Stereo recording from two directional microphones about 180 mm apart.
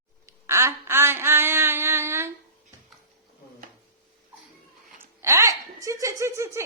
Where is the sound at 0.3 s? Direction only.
15° right (ahead or behind).